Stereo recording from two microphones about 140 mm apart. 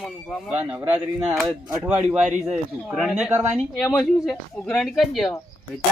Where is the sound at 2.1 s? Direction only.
5° right (ahead or behind).